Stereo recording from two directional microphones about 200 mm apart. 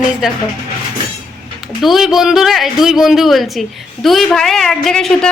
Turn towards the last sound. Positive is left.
turn(degrees=5)  # may be behind; listen again after turning